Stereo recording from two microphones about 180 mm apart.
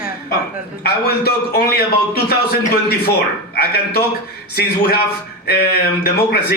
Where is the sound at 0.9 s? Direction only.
60° left (ahead or behind).